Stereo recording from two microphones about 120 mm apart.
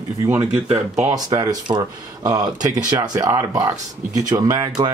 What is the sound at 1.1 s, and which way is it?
Speech, 30° right (ahead or behind).